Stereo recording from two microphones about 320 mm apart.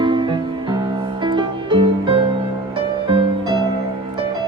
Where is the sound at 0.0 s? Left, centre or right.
Centre.